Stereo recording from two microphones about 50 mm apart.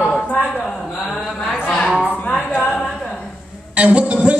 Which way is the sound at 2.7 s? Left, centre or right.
Centre.